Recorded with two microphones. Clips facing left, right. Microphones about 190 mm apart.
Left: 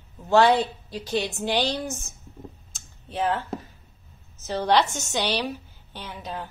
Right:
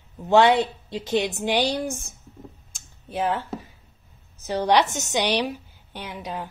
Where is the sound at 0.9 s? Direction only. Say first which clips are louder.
Right 3 dB; 25° right (ahead or behind).